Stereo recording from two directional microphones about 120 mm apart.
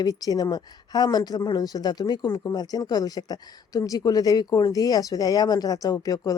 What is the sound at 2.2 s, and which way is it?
Speech, 20° left (ahead or behind).